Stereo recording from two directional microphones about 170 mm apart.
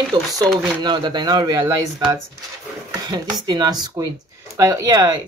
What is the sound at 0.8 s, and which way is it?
Speech, 25° right (ahead or behind).